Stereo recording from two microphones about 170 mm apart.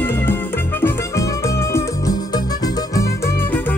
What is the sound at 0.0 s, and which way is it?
Music, 10° left (ahead or behind).